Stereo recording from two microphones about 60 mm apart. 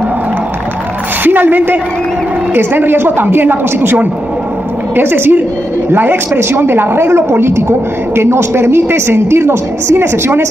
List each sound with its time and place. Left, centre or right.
1.2 s a woman's voice: right